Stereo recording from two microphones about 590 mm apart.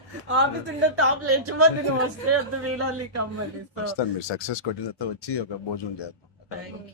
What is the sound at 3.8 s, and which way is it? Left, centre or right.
Speech, left.